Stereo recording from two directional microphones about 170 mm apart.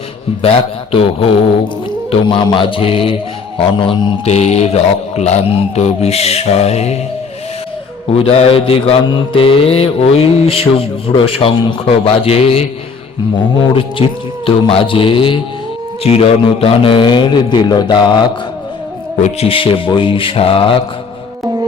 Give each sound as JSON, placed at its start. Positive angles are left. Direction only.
{"t": 0.4, "sound": "mantra", "side_deg": 35}
{"t": 8.2, "sound": "mantra", "side_deg": 35}
{"t": 14.4, "sound": "mantra", "side_deg": 30}
{"t": 16.0, "sound": "a man's voice", "side_deg": 35}
{"t": 19.2, "sound": "mantra", "side_deg": 35}